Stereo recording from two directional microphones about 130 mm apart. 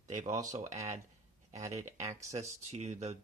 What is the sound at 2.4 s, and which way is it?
Speech, 55° right (ahead or behind).